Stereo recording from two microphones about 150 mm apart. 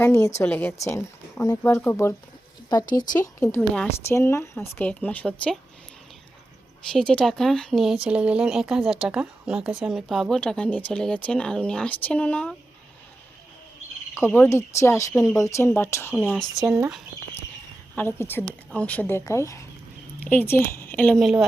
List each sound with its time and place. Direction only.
0.0 s speech: 20° left (ahead or behind)
2.6 s speech: 25° left (ahead or behind); by 5.5 s 5° left (ahead or behind)
6.9 s speech: 5° left (ahead or behind)
14.3 s speech: 15° left (ahead or behind)
16.1 s speech: centre (ahead or behind)
17.9 s speech: 15° left (ahead or behind); by 21.4 s centre (ahead or behind)